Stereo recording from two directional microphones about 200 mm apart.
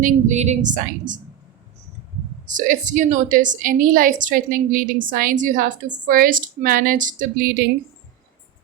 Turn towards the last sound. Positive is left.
turn(degrees=-45)  # may be behind; listen again after turning